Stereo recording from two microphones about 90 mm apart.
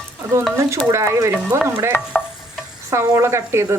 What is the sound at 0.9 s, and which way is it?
Speech, 30° right (ahead or behind).